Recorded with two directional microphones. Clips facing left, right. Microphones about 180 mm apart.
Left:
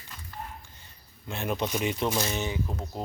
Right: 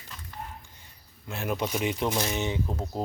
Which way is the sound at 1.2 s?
5° right (ahead or behind).